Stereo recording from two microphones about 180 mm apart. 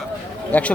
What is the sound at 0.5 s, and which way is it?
Speech, 10° left (ahead or behind).